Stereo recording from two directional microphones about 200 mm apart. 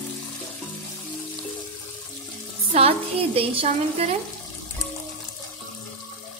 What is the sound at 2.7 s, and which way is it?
Speech, 30° right (ahead or behind).